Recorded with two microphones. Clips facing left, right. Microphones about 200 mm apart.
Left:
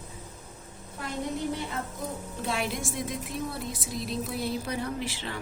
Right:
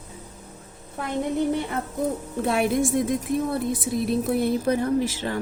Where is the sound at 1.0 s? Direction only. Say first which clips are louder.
Right 7 dB; 55° right (ahead or behind).